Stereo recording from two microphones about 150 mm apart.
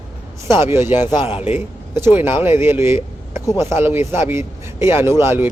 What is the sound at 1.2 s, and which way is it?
Speech, 40° left (ahead or behind).